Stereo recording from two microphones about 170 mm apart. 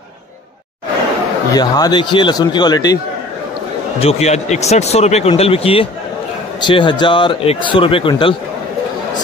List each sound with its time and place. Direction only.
1.5 s a man's voice: 25° left (ahead or behind)
4.0 s a man's voice: 40° left (ahead or behind)